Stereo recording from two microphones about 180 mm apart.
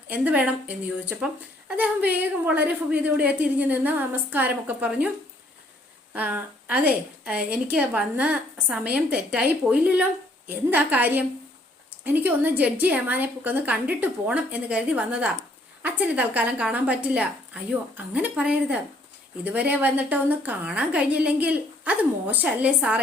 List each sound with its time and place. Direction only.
0.1 s a woman's voice: 10° right (ahead or behind)
6.1 s a woman's voice: 10° right (ahead or behind)